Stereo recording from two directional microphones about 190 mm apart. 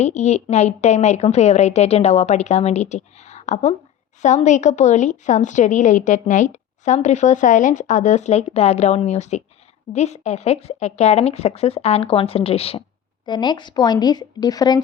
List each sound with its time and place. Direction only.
0.0 s a woman's voice: 35° left (ahead or behind); by 14.8 s 20° left (ahead or behind)